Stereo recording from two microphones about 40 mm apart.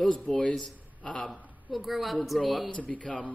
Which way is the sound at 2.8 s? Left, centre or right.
Left.